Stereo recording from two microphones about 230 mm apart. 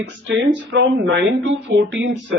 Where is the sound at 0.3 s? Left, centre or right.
Right.